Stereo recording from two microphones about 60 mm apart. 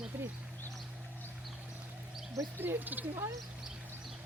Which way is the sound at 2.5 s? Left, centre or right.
Right.